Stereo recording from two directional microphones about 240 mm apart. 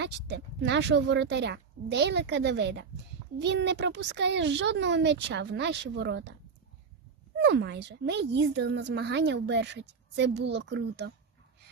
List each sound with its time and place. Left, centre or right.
0.0 s speech: right
7.3 s speech: right